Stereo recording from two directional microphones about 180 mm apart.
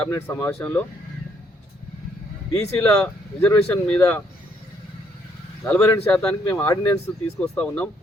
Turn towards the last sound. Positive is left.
turn(degrees=5)  # may be behind; listen again after turning